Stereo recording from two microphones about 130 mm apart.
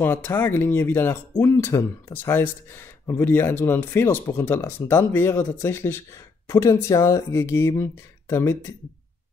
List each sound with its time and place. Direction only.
0.0 s speech: 15° left (ahead or behind)